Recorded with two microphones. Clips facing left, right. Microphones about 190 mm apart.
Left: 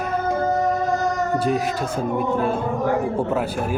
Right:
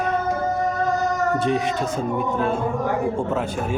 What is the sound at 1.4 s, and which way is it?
Speech, 5° left (ahead or behind).